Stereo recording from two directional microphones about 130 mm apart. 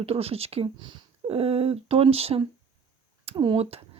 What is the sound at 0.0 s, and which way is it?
Speech, 50° right (ahead or behind).